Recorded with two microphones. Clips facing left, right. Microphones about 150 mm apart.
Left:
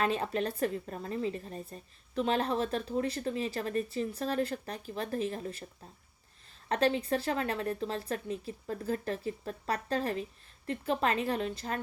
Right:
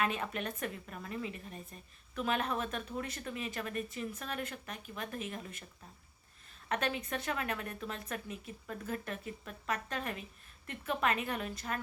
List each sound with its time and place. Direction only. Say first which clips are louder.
0.0 s a woman's voice: left 5 dB; 30° left (ahead or behind)
6.7 s a woman's voice: left 7 dB; 30° left (ahead or behind)